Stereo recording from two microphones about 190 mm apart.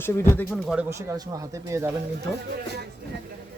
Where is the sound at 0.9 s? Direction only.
15° right (ahead or behind).